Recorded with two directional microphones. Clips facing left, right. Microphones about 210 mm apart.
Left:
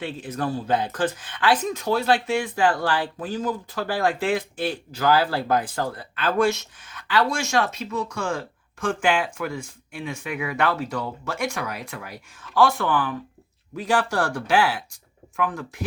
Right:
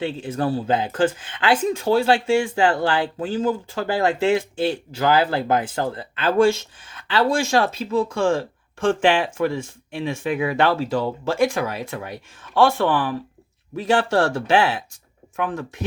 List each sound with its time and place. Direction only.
0.0 s speech: 25° right (ahead or behind)